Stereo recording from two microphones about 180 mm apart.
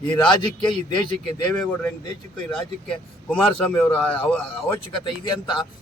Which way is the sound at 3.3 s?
5° left (ahead or behind).